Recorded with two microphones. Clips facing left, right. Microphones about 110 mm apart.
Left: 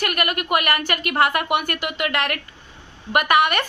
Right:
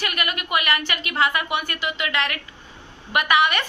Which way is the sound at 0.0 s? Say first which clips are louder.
Left 4 dB; 50° left (ahead or behind).